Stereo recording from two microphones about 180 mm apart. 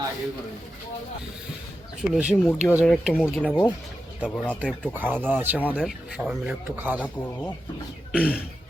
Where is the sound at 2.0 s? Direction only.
5° right (ahead or behind).